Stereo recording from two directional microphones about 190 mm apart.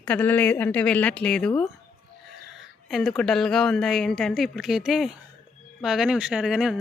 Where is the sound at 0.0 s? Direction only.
10° left (ahead or behind).